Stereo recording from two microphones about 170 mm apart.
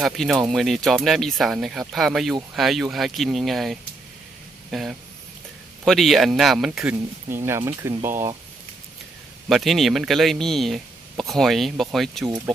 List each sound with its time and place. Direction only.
0.0 s speech: centre (ahead or behind)
7.3 s speech: 15° right (ahead or behind)
9.5 s speech: centre (ahead or behind)